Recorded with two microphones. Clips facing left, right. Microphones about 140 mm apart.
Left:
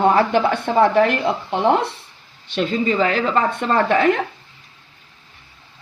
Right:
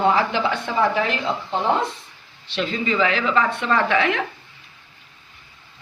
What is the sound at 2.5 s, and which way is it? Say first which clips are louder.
Speech: left 4 dB; 45° left (ahead or behind).